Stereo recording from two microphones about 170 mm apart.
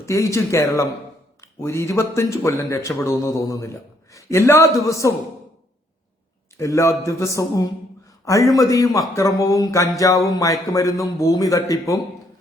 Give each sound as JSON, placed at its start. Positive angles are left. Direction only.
{"t": 0.0, "sound": "a man's voice", "side_deg": 15}
{"t": 6.6, "sound": "a man's voice", "side_deg": 15}